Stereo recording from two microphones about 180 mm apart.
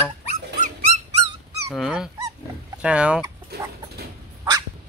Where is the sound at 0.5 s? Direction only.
40° right (ahead or behind).